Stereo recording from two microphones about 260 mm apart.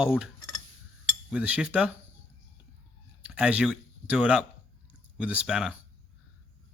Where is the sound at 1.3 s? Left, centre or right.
Centre.